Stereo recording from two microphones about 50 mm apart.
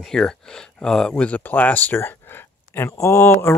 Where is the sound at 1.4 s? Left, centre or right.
Left.